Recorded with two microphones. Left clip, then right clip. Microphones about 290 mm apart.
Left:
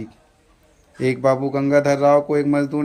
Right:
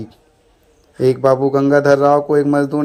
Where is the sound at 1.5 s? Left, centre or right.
Right.